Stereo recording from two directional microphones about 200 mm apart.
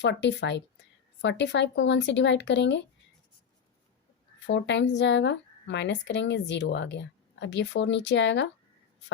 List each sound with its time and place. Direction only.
0.0 s speech: 60° left (ahead or behind)
4.4 s speech: 65° left (ahead or behind)